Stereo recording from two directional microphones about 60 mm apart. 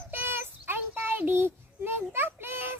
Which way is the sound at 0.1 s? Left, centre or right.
Right.